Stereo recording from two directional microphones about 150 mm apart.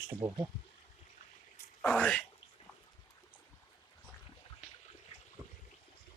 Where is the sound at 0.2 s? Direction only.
20° right (ahead or behind).